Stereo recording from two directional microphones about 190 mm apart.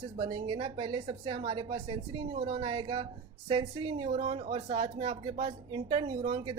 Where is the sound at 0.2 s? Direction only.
25° right (ahead or behind).